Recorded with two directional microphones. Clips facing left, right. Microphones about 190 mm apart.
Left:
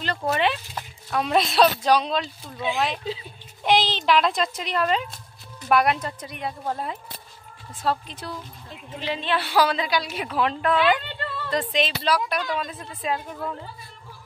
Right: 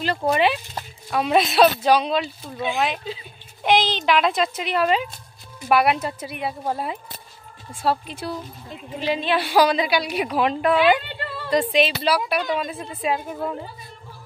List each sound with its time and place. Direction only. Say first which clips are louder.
0.2 s speech: right 3 dB; 10° right (ahead or behind)